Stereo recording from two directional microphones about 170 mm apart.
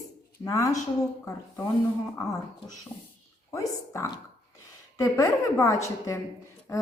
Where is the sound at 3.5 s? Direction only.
20° left (ahead or behind).